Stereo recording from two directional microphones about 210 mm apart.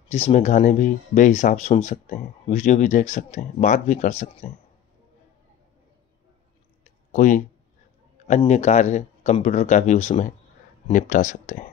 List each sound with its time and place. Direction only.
0.1 s speech: 30° left (ahead or behind)
6.8 s clicking: 35° left (ahead or behind)
8.5 s speech: 35° left (ahead or behind)